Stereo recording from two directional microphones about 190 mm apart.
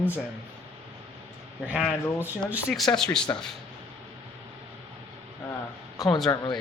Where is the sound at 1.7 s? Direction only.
5° right (ahead or behind).